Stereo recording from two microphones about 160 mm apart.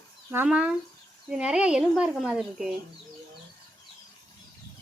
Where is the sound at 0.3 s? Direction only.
10° right (ahead or behind).